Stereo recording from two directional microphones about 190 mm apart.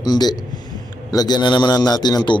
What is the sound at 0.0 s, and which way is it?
A man's voice, 20° left (ahead or behind).